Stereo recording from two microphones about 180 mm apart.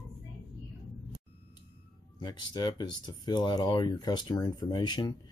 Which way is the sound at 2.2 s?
25° left (ahead or behind).